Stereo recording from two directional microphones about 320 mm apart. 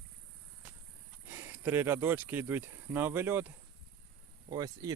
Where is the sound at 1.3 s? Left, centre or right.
Centre.